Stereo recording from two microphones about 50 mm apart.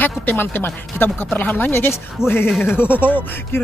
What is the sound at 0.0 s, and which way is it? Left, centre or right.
Speech, left.